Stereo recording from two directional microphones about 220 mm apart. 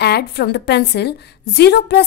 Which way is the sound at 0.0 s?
50° left (ahead or behind).